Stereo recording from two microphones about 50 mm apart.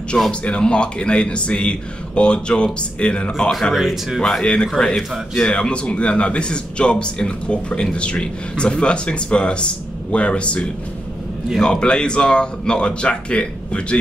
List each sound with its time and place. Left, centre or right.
0.3 s a man's voice: left
3.7 s speech: centre
4.2 s a man's voice: centre